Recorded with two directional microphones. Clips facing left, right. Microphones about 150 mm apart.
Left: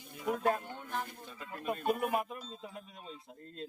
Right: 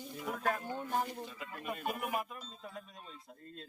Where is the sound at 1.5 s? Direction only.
25° left (ahead or behind).